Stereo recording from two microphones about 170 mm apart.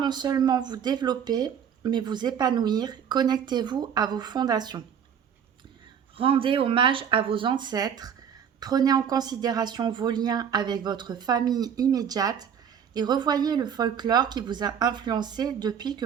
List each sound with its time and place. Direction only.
0.0 s speech: 25° right (ahead or behind)
6.1 s speech: 30° right (ahead or behind)